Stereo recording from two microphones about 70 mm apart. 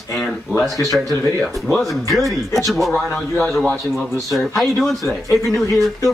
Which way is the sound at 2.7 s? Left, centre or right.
Centre.